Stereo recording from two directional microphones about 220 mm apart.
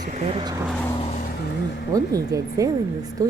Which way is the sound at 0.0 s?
35° right (ahead or behind).